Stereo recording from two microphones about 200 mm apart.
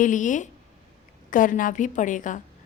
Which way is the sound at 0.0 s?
40° left (ahead or behind).